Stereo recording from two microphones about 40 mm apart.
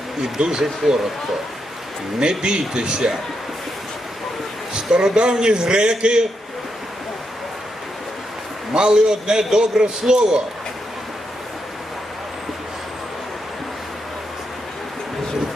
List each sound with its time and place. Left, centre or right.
0.2 s speech: centre
2.4 s a man's voice: right
4.9 s a man's voice: centre
8.7 s a man's voice: centre